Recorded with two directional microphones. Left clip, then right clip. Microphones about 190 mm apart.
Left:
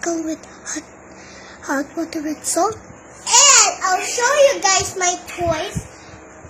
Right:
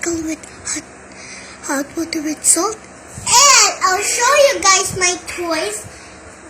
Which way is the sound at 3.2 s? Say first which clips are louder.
Right 2 dB; 25° left (ahead or behind).